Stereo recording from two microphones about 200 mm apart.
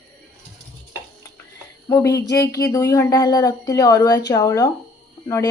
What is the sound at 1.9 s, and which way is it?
Speech, 15° left (ahead or behind).